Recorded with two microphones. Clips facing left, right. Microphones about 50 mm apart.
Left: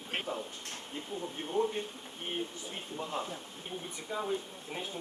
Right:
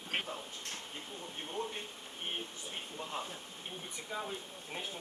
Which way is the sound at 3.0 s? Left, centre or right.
Centre.